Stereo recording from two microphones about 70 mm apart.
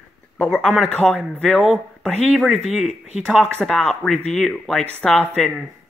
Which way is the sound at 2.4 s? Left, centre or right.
Centre.